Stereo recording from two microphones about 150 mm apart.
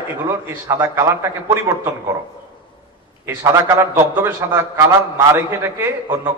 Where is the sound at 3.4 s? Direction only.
20° right (ahead or behind).